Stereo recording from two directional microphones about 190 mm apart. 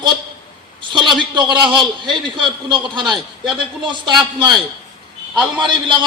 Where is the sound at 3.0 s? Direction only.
Centre (ahead or behind).